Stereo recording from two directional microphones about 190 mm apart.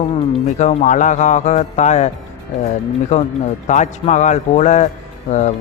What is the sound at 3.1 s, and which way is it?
Speech, 35° left (ahead or behind).